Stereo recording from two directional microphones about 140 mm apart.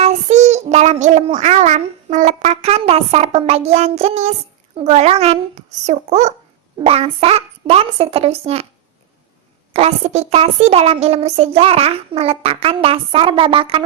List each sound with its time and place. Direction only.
0.0 s child singing: 55° right (ahead or behind)
1.4 s speech: 55° right (ahead or behind)
9.7 s speech: 50° right (ahead or behind)